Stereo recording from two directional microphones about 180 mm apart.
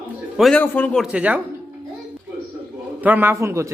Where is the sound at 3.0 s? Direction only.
10° right (ahead or behind).